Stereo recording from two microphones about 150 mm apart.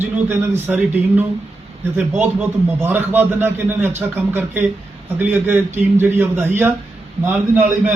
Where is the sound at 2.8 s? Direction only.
15° right (ahead or behind).